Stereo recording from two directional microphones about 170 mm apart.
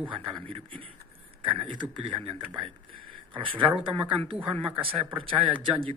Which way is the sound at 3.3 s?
30° right (ahead or behind).